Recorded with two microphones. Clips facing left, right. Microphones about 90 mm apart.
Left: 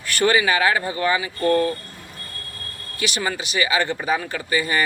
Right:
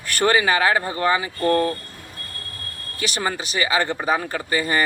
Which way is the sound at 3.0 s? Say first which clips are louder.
Even; 35° right (ahead or behind).